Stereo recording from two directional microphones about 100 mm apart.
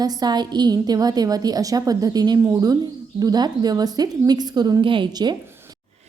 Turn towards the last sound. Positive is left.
turn(degrees=-50)  # may be behind; listen again after turning